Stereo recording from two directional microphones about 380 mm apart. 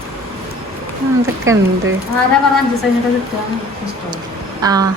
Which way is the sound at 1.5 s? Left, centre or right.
Right.